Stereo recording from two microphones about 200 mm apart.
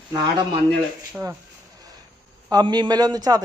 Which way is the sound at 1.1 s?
15° right (ahead or behind).